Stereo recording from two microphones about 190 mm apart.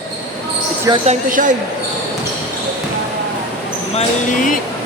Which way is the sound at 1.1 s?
40° right (ahead or behind).